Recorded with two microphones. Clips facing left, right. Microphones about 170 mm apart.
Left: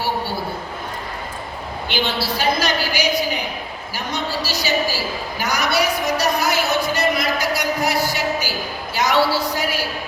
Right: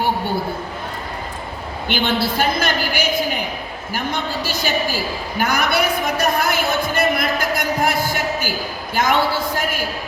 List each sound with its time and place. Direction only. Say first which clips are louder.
1.9 s a woman's voice: right 3 dB; 50° right (ahead or behind)
5.4 s a sound: right 2 dB; 55° right (ahead or behind)
9.0 s speech: even; 50° right (ahead or behind)